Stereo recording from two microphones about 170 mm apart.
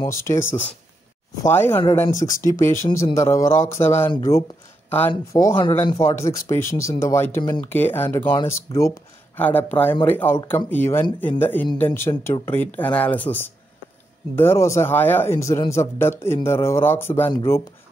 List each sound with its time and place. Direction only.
0.0 s speech: 15° left (ahead or behind)
5.6 s speech: 30° left (ahead or behind)
5.9 s speech: 15° left (ahead or behind)